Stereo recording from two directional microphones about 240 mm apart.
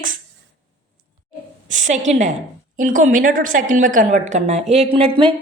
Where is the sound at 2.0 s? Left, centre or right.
Right.